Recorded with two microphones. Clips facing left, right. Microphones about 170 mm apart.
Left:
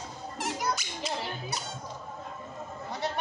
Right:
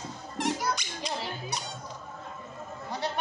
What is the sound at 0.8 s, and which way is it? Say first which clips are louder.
Squeak: even; 5° left (ahead or behind).